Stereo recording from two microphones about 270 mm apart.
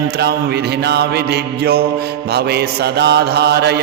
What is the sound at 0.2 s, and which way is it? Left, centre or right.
A man's voice, right.